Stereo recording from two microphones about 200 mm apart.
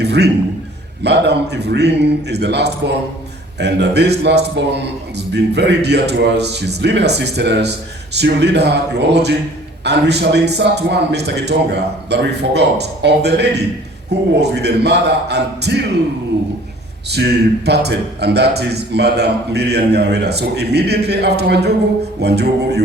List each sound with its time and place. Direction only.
0.0 s a sound: 55° right (ahead or behind)
1.0 s a man's voice: 55° right (ahead or behind)
17.1 s a man's voice: 55° right (ahead or behind)